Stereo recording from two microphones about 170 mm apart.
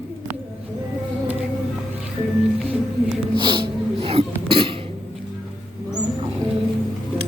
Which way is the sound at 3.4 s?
30° right (ahead or behind).